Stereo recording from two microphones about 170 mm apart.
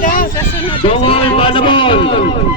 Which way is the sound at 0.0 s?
55° left (ahead or behind).